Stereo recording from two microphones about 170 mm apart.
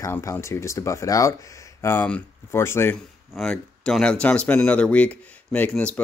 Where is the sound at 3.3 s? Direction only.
Centre (ahead or behind).